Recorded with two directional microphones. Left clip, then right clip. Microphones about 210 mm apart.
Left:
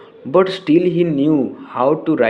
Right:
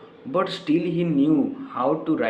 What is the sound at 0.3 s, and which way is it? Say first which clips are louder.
A man's voice: left 9 dB; 40° left (ahead or behind).